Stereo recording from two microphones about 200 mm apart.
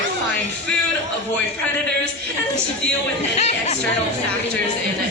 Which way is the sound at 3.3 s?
35° left (ahead or behind).